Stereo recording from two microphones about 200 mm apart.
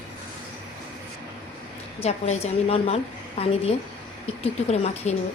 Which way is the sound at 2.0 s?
35° left (ahead or behind).